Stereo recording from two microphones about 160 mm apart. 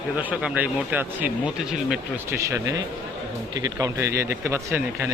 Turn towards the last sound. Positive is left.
turn(degrees=-15)  # may be behind; listen again after turning